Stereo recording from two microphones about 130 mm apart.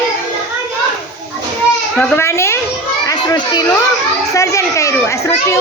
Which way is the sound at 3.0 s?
30° left (ahead or behind).